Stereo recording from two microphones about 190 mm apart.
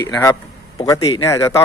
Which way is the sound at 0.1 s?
15° left (ahead or behind).